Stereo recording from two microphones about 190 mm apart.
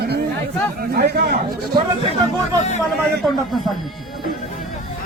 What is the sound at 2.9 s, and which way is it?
Speech, centre (ahead or behind).